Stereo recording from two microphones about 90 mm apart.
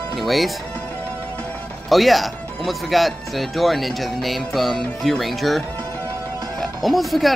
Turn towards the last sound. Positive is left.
turn(degrees=0)  # may be behind; listen again after turning